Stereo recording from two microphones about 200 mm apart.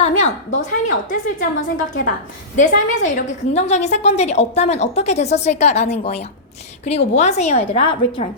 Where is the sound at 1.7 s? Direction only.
40° left (ahead or behind).